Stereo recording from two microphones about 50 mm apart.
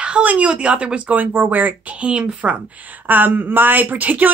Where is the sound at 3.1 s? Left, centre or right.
Right.